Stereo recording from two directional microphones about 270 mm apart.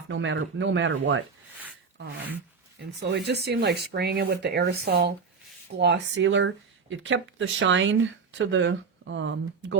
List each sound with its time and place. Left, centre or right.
0.1 s speech: right
3.0 s speech: right